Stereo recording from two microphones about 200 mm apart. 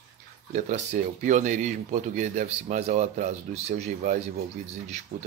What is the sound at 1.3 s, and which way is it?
A man's voice, 35° right (ahead or behind).